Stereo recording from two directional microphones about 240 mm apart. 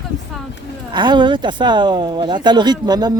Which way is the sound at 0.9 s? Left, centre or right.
Centre.